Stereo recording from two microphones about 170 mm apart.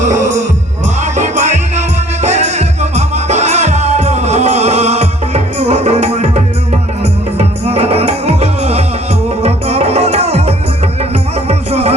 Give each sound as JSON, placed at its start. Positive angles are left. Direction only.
{"t": 0.0, "sound": "music", "side_deg": -50}